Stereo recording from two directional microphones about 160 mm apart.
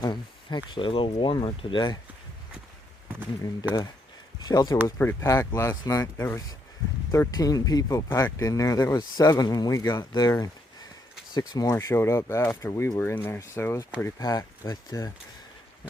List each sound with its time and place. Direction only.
0.0 s speech: 30° left (ahead or behind)
4.4 s speech: 25° left (ahead or behind)